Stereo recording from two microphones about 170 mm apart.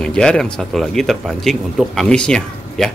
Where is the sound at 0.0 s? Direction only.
5° left (ahead or behind).